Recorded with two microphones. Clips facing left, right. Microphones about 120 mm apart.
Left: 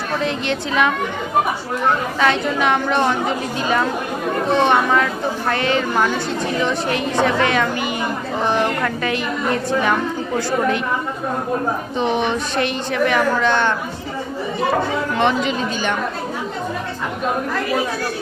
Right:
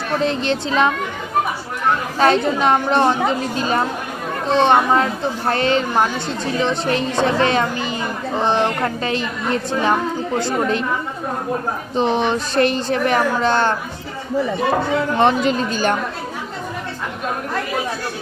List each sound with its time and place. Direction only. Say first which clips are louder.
0.2 s a woman's voice: right 2 dB; 35° right (ahead or behind)
2.1 s a woman's voice: right 2 dB; 35° right (ahead or behind)
11.9 s a woman's voice: right 3 dB; 35° right (ahead or behind)
15.2 s a woman's voice: right 2 dB; 40° right (ahead or behind)